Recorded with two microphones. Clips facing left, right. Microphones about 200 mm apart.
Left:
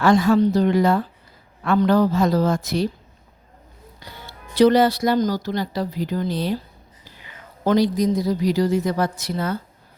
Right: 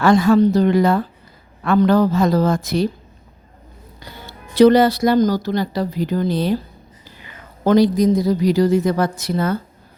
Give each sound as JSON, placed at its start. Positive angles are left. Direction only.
{"t": 0.0, "sound": "a woman's voice", "side_deg": -60}
{"t": 4.5, "sound": "a woman's voice", "side_deg": -55}